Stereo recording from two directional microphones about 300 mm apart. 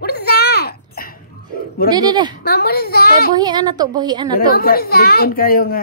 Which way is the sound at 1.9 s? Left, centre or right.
Centre.